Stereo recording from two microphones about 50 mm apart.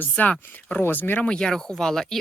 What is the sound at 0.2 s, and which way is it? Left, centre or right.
Speech, left.